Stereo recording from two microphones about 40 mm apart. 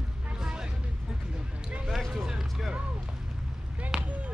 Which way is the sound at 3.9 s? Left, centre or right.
Centre.